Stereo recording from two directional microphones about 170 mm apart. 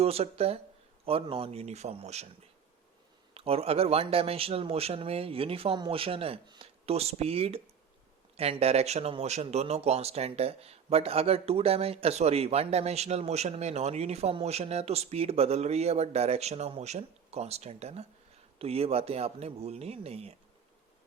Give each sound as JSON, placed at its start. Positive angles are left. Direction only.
{"t": 0.0, "sound": "speech", "side_deg": -35}
{"t": 3.3, "sound": "speech", "side_deg": -35}